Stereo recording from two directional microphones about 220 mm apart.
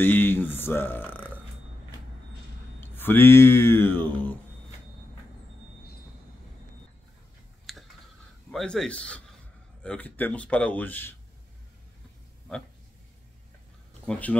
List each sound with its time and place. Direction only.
0.0 s speech: 10° left (ahead or behind)
2.8 s speech: 10° left (ahead or behind)
7.7 s clicking: centre (ahead or behind)
8.5 s a man's voice: 5° left (ahead or behind)
14.1 s a man's voice: 5° left (ahead or behind)